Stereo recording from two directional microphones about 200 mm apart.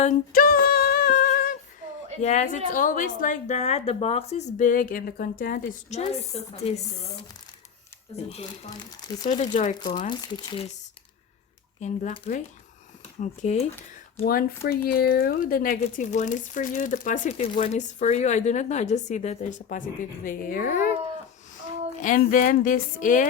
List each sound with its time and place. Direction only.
0.0 s a sound: 40° left (ahead or behind)
2.2 s speech: 35° left (ahead or behind)
8.1 s speech: 30° left (ahead or behind)
10.2 s speech: 20° left (ahead or behind)
11.8 s speech: 30° left (ahead or behind)
14.3 s speech: 50° left (ahead or behind)
22.0 s speech: 40° left (ahead or behind)